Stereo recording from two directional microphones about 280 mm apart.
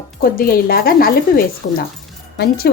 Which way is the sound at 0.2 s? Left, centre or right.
Left.